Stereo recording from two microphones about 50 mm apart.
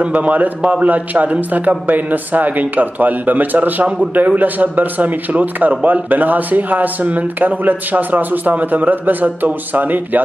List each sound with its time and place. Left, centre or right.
0.0 s a man's voice: right